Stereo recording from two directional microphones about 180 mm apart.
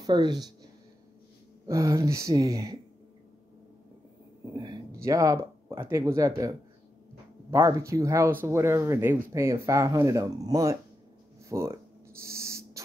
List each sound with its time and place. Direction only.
0.0 s a woman's voice: 25° right (ahead or behind)
1.7 s speech: 15° right (ahead or behind)
4.6 s speech: 20° right (ahead or behind)
7.5 s speech: 15° right (ahead or behind)
12.2 s owl: 15° right (ahead or behind)